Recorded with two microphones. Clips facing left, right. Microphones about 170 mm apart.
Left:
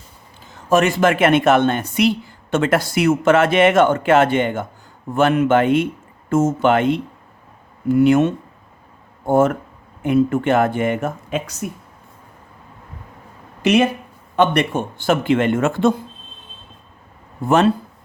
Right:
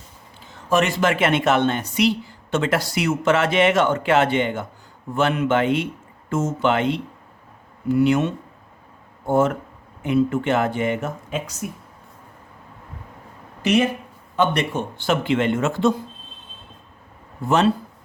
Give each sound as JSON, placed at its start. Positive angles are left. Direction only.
{"t": 0.7, "sound": "a woman's voice", "side_deg": 50}
{"t": 13.6, "sound": "speech", "side_deg": 70}
{"t": 14.3, "sound": "a woman's voice", "side_deg": 55}